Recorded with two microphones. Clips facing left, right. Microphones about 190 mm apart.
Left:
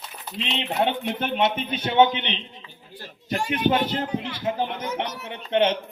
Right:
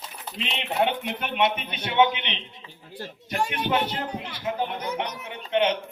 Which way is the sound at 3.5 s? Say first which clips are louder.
Left 6 dB; 35° left (ahead or behind).